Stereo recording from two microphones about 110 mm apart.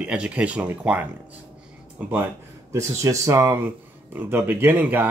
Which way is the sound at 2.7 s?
30° right (ahead or behind).